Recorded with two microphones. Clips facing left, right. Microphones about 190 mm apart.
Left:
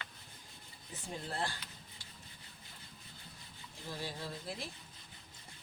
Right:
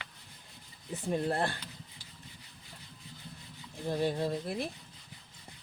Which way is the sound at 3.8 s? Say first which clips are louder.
Right 12 dB; 60° right (ahead or behind).